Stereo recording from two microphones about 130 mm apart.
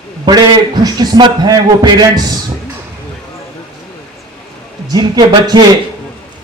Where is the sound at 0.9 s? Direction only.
30° right (ahead or behind).